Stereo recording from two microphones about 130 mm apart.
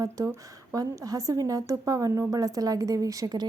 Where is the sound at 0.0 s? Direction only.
25° right (ahead or behind).